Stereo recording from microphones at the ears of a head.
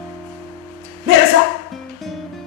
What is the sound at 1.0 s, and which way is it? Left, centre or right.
Music, left.